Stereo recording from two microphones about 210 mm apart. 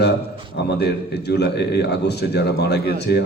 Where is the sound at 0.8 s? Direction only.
50° left (ahead or behind).